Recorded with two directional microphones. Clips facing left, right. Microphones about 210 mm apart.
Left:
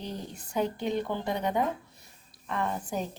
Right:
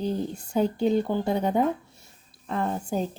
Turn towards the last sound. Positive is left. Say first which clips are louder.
# right 4 dB
turn(degrees=-30)  # may be behind; listen again after turning